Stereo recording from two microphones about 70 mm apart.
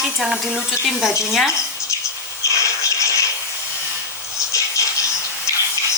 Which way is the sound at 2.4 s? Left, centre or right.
Left.